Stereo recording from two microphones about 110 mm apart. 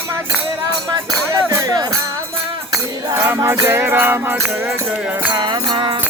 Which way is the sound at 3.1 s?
20° right (ahead or behind).